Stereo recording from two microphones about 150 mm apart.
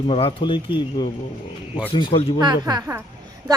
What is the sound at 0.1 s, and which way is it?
Speech, 35° left (ahead or behind).